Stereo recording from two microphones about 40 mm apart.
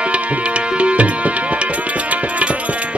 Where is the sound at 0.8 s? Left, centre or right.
Right.